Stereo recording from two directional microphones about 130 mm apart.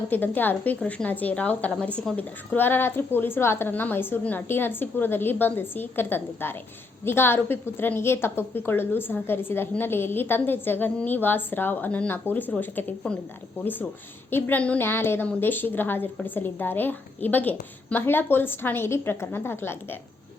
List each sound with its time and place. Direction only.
0.1 s a woman's voice: 15° left (ahead or behind)
14.3 s a woman's voice: 15° left (ahead or behind)